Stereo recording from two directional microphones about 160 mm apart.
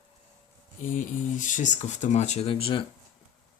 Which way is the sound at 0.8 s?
55° left (ahead or behind).